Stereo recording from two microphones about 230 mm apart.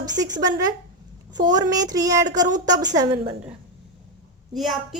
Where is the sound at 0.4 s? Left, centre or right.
Centre.